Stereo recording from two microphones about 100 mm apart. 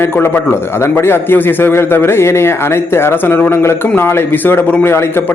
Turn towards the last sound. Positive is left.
turn(degrees=25)  # may be behind; listen again after turning